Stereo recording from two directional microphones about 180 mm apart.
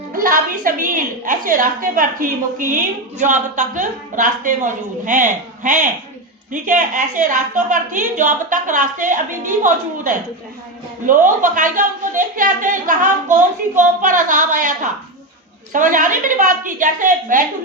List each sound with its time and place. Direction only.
0.1 s speech: 50° right (ahead or behind)